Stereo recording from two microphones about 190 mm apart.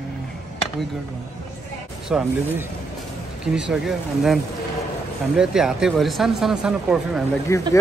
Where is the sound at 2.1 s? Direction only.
5° right (ahead or behind).